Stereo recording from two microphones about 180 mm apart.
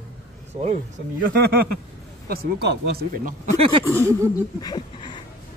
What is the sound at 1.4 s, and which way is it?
Speech, 60° right (ahead or behind).